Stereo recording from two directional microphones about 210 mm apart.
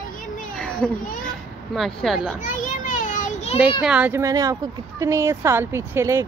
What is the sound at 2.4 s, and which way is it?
Children playing, 40° left (ahead or behind).